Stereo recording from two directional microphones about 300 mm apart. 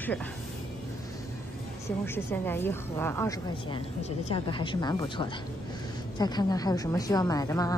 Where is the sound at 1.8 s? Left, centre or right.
Centre.